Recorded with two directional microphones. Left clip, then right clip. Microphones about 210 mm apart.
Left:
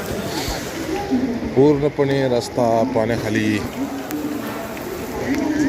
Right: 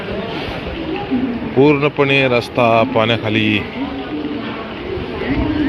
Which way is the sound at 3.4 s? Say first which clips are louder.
Right 5 dB; 50° left (ahead or behind).